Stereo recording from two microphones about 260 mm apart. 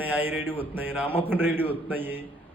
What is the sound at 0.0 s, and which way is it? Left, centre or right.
A man's voice, centre.